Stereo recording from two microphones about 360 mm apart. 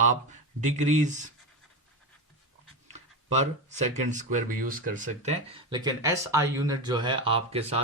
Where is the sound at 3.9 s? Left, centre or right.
Right.